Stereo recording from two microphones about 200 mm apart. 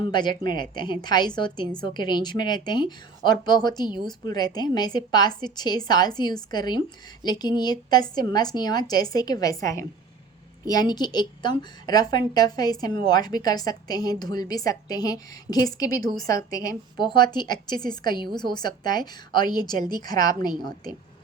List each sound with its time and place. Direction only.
0.0 s a woman's voice: 20° left (ahead or behind)